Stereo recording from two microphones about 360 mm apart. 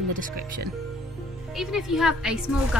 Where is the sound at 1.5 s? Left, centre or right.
Centre.